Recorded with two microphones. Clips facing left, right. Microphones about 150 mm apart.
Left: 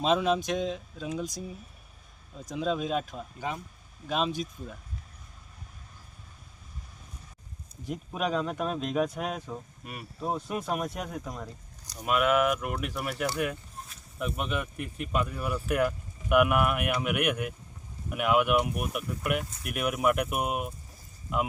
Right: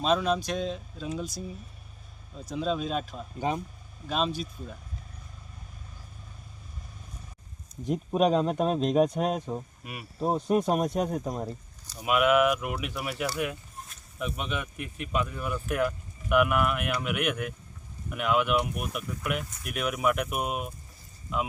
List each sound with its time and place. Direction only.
0.0 s speech: 15° left (ahead or behind)
0.6 s speech: 10° left (ahead or behind)
2.4 s speech: 15° left (ahead or behind)
7.9 s speech: 35° right (ahead or behind)
9.8 s speech: 5° right (ahead or behind)
10.2 s speech: 30° right (ahead or behind)
11.9 s speech: 5° right (ahead or behind)